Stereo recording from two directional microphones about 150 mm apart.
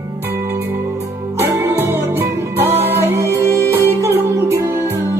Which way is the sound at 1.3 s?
15° right (ahead or behind).